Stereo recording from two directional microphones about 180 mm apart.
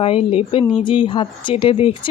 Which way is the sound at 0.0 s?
30° left (ahead or behind).